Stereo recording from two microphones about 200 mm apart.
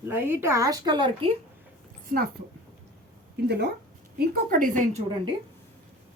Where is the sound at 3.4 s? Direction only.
55° right (ahead or behind); by 5.0 s 35° right (ahead or behind).